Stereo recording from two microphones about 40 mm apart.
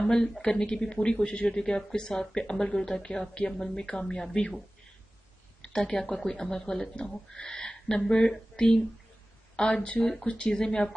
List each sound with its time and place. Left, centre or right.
0.0 s speech: centre
5.6 s speech: centre